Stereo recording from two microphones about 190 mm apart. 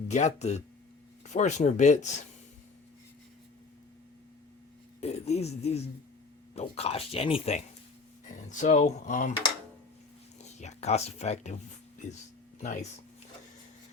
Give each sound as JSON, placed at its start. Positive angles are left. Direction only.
{"t": 0.1, "sound": "speech", "side_deg": 35}
{"t": 4.9, "sound": "speech", "side_deg": 35}
{"t": 10.4, "sound": "speech", "side_deg": 35}
{"t": 12.5, "sound": "speech", "side_deg": 35}